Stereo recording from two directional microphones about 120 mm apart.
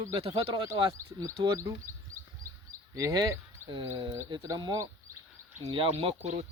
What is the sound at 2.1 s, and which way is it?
Bird, 25° right (ahead or behind).